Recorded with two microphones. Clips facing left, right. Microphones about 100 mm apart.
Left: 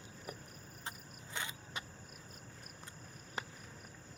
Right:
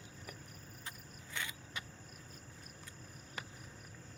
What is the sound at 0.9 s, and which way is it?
Vehicle, 25° left (ahead or behind).